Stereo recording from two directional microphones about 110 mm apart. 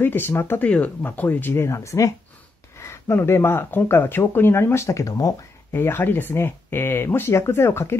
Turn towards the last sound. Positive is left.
turn(degrees=25)  # may be behind; listen again after turning